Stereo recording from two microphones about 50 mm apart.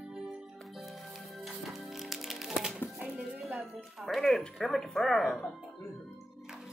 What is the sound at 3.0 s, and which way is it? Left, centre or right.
Music, right.